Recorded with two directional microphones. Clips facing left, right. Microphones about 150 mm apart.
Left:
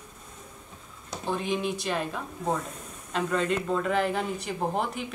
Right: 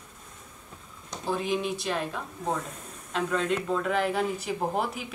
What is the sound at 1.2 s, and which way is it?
Speech, centre (ahead or behind).